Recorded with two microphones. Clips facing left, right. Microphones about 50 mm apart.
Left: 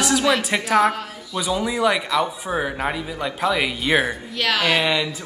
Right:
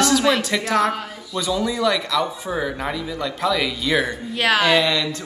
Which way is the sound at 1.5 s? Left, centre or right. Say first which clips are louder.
Even; left.